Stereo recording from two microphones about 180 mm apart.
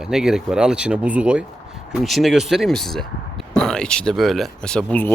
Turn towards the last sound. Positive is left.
turn(degrees=5)  # may be behind; listen again after turning